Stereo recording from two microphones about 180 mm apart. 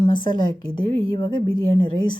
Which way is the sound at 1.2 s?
25° left (ahead or behind).